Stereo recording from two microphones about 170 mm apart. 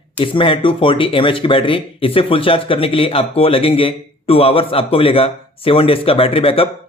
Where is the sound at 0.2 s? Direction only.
30° left (ahead or behind).